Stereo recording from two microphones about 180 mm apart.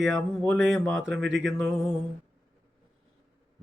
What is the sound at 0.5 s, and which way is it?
Speech, 90° right.